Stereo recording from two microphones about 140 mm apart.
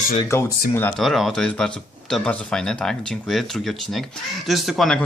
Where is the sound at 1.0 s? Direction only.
Centre (ahead or behind).